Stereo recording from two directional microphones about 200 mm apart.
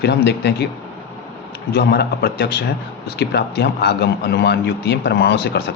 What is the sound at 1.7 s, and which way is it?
A man's voice, 55° left (ahead or behind).